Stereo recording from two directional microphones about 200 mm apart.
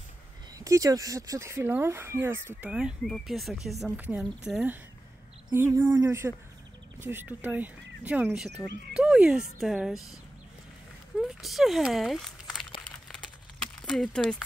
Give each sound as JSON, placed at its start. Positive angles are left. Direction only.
{"t": 0.6, "sound": "speech", "side_deg": -15}
{"t": 11.1, "sound": "speech", "side_deg": 0}
{"t": 13.7, "sound": "speech", "side_deg": 0}